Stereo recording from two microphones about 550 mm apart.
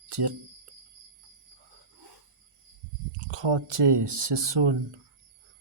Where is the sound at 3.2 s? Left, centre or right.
Right.